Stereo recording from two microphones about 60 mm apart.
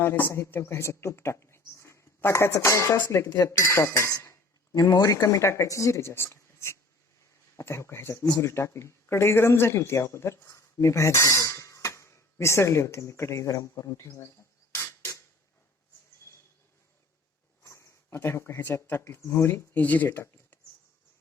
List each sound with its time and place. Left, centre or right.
0.0 s speech: left
3.2 s speech: left
3.7 s speech: left
14.7 s a sound: left
17.6 s speech: left
19.2 s speech: left
19.7 s speech: left
20.1 s speech: left